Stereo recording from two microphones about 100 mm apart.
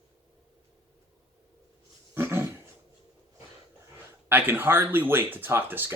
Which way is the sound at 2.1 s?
25° right (ahead or behind).